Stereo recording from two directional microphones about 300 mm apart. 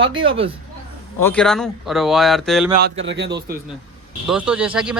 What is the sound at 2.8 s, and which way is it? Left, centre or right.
Speech, right.